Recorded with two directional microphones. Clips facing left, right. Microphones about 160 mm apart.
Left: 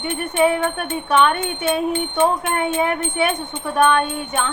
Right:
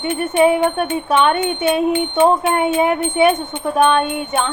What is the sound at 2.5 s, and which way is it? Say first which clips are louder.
A woman's voice: right 4 dB; 30° right (ahead or behind).